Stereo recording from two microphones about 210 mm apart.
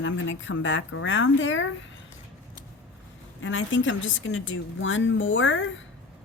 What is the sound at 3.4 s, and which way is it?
A woman's voice, 65° left (ahead or behind).